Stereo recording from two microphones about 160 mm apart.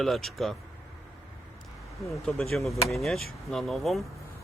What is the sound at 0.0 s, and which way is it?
Speech, centre (ahead or behind).